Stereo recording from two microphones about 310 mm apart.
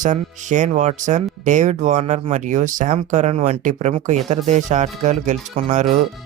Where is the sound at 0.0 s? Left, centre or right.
Right.